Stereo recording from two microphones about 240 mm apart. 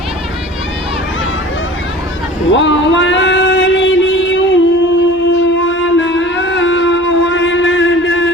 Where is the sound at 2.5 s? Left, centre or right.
Left.